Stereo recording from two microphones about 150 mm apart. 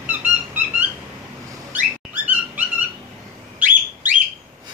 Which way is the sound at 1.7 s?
10° right (ahead or behind).